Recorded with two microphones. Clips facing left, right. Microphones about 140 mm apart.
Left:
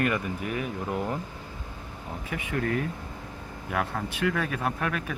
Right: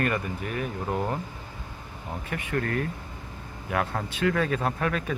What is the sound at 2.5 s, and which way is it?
Speech, 5° left (ahead or behind).